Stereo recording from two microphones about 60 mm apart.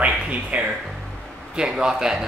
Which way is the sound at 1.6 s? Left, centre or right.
Centre.